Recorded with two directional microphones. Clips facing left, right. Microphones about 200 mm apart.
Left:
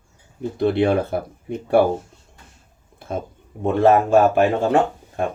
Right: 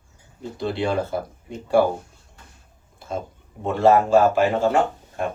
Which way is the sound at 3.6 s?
55° left (ahead or behind).